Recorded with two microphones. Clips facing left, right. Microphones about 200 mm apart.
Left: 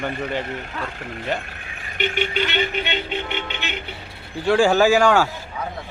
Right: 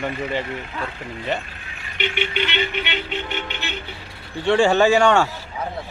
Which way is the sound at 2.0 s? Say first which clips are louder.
Left 1 dB; 45° left (ahead or behind).